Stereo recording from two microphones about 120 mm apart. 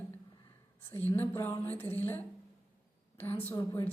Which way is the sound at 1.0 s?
15° left (ahead or behind).